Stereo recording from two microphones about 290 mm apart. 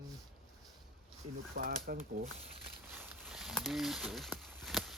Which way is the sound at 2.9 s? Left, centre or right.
Centre.